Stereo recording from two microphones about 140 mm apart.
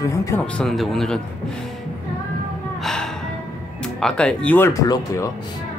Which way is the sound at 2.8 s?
5° left (ahead or behind).